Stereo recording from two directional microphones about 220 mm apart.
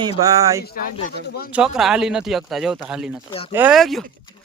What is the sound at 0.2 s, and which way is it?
Speech, 15° right (ahead or behind).